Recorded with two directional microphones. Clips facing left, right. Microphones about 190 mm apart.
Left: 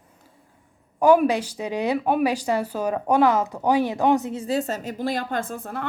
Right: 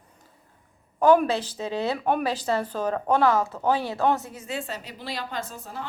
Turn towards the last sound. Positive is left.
turn(degrees=60)  # may be behind; listen again after turning